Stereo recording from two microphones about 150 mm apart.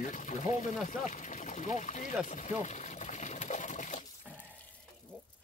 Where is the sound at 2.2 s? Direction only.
55° left (ahead or behind).